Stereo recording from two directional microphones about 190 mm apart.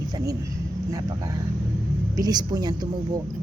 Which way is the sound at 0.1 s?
20° right (ahead or behind).